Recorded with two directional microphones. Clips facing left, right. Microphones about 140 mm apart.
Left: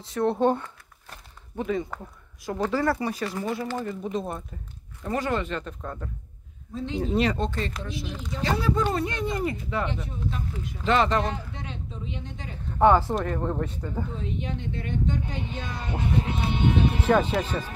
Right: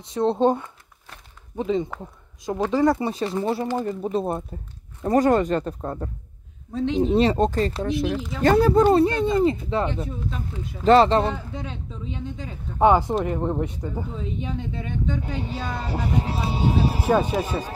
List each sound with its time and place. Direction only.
0.0 s speech: 20° right (ahead or behind)
7.3 s speech: 40° right (ahead or behind)
7.9 s speech: 55° right (ahead or behind); by 11.3 s 30° right (ahead or behind)
12.7 s speech: 15° right (ahead or behind)
15.4 s speech: 35° right (ahead or behind)
17.0 s speech: 10° right (ahead or behind)